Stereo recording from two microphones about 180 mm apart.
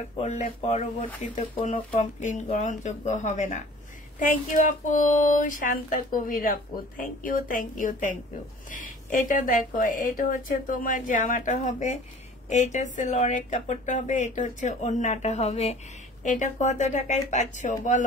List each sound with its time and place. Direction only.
0.2 s speech: 40° left (ahead or behind)